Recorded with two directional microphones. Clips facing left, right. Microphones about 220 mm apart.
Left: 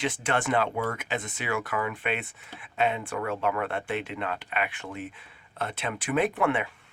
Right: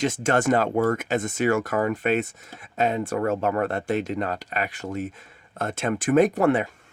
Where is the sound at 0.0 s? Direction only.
45° right (ahead or behind).